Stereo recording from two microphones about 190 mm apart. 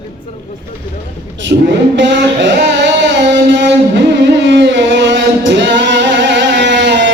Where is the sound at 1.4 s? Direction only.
70° right (ahead or behind).